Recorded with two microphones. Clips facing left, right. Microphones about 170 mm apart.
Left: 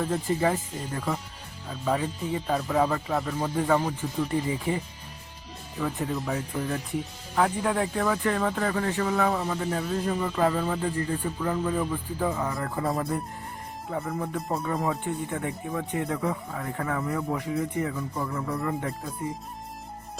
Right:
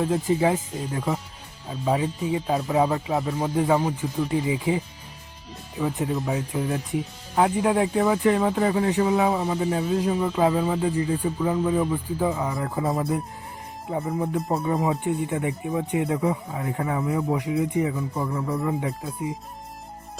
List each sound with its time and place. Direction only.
0.0 s speech: 10° right (ahead or behind)
13.9 s speech: 15° right (ahead or behind)
14.6 s speech: 5° right (ahead or behind)
15.0 s speech: 15° right (ahead or behind)